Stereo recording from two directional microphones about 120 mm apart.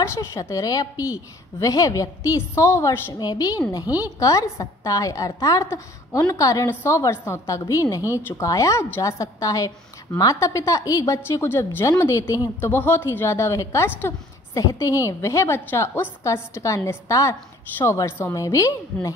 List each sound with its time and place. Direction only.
0.0 s a woman's voice: 20° left (ahead or behind)
3.2 s a woman's voice: 30° left (ahead or behind)